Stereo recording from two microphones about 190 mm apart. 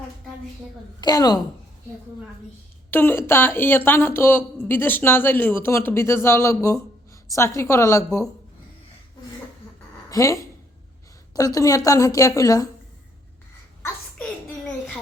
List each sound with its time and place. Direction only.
1.0 s a woman's voice: 20° left (ahead or behind)
2.9 s speech: 10° left (ahead or behind)
10.1 s a woman's voice: 15° left (ahead or behind)